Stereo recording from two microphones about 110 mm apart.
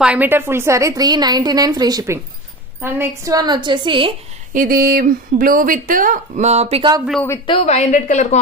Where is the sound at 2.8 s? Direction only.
20° right (ahead or behind).